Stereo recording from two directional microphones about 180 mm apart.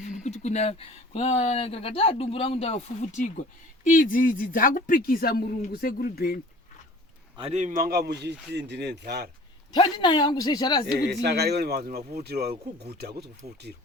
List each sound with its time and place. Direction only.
0.0 s speech: 40° left (ahead or behind); by 6.4 s 55° left (ahead or behind)
7.3 s speech: 35° right (ahead or behind); by 9.3 s 65° right (ahead or behind)
9.7 s speech: 25° left (ahead or behind)
11.1 s speech: 65° right (ahead or behind)